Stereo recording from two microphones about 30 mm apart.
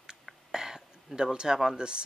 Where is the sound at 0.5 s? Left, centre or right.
Centre.